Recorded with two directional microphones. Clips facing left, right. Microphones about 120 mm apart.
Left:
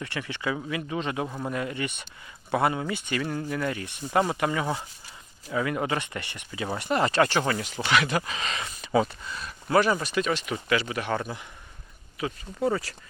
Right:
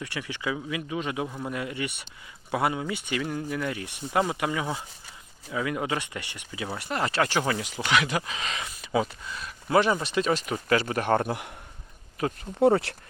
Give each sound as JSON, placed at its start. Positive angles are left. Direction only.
{"t": 0.0, "sound": "speech", "side_deg": -10}
{"t": 1.3, "sound": "speech", "side_deg": 15}
{"t": 1.5, "sound": "speech", "side_deg": -10}
{"t": 6.7, "sound": "speech", "side_deg": 0}
{"t": 7.3, "sound": "speech", "side_deg": -10}
{"t": 9.7, "sound": "speech", "side_deg": -20}
{"t": 11.3, "sound": "a man's voice", "side_deg": -65}
{"t": 12.2, "sound": "speech", "side_deg": -45}
{"t": 12.6, "sound": "speech", "side_deg": -60}